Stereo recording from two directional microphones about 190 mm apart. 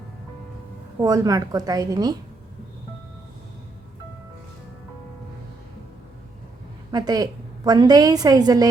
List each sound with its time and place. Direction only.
1.0 s a woman's voice: 20° right (ahead or behind)
6.9 s a woman's voice: 20° right (ahead or behind)